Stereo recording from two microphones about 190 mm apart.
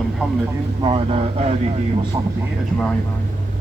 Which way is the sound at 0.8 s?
30° right (ahead or behind).